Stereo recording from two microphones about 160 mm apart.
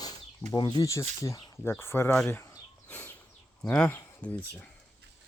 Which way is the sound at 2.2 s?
15° left (ahead or behind).